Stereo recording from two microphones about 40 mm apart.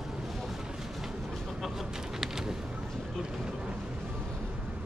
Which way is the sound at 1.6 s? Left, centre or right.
Centre.